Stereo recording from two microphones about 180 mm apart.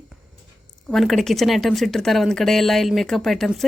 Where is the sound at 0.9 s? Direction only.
Centre (ahead or behind).